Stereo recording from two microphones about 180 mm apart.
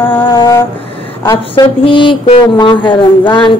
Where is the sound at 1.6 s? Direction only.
25° left (ahead or behind).